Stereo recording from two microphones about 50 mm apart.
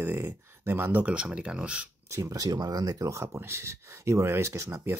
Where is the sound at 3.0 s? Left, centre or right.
Right.